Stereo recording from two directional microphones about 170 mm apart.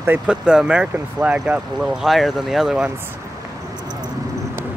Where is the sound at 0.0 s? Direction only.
10° right (ahead or behind).